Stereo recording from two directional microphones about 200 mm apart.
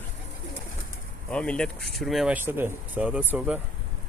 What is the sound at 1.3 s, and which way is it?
Speech, 5° left (ahead or behind).